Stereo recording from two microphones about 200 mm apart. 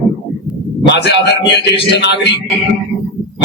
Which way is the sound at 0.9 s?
55° left (ahead or behind).